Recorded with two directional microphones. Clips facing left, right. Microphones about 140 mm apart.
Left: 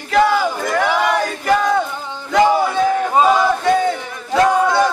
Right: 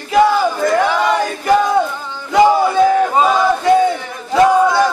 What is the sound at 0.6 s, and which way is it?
Crowd, 10° left (ahead or behind).